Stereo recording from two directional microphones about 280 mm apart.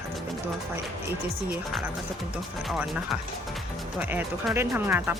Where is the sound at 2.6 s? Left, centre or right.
Centre.